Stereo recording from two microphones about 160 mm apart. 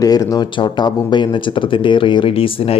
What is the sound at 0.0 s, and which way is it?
Speech, 20° left (ahead or behind).